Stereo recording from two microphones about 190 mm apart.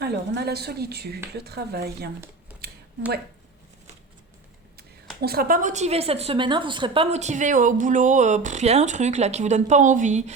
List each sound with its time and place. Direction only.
0.0 s a woman's voice: 60° right (ahead or behind)
2.6 s a sound: 55° right (ahead or behind)
5.2 s a woman's voice: 50° right (ahead or behind)